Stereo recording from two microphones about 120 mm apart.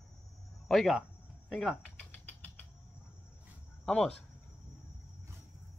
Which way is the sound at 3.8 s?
5° left (ahead or behind).